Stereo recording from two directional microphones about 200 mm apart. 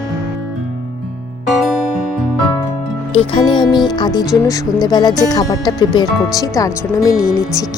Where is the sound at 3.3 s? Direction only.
20° left (ahead or behind).